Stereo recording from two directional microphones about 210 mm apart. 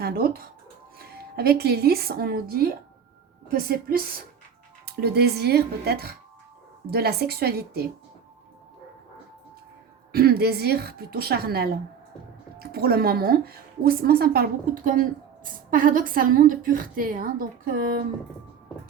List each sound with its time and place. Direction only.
0.0 s a woman's voice: 45° right (ahead or behind)
10.1 s speech: 45° right (ahead or behind)
15.7 s a woman's voice: 40° right (ahead or behind)